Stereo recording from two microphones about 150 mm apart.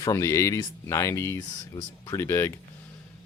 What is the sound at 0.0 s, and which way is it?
Speech, 20° left (ahead or behind).